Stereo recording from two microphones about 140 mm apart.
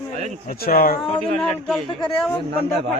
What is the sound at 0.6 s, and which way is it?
Speech, 90° left.